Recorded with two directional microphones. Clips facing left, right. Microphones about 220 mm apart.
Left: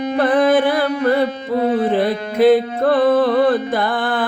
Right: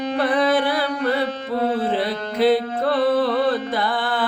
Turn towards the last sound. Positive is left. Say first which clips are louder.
# left 3 dB
turn(degrees=50)  # may be behind; listen again after turning